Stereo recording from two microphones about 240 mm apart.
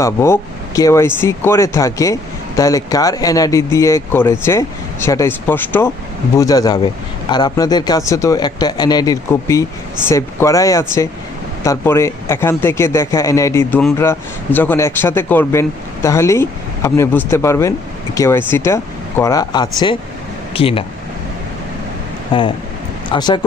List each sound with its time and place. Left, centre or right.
0.0 s speech: centre
22.3 s speech: left